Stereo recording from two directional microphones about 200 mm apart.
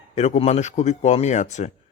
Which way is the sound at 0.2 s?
35° left (ahead or behind).